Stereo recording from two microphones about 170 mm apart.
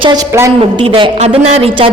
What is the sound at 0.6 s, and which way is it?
A man's voice, 30° right (ahead or behind).